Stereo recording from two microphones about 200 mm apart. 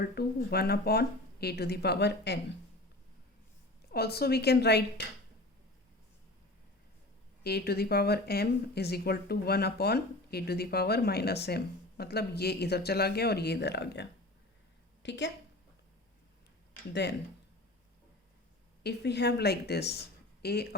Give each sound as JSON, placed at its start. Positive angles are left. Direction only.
{"t": 0.0, "sound": "speech", "side_deg": 50}
{"t": 3.9, "sound": "speech", "side_deg": 50}
{"t": 7.4, "sound": "a woman's voice", "side_deg": 50}
{"t": 16.9, "sound": "speech", "side_deg": 60}
{"t": 18.8, "sound": "speech", "side_deg": 55}